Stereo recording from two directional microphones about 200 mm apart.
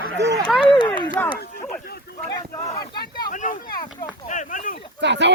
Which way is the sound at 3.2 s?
40° left (ahead or behind).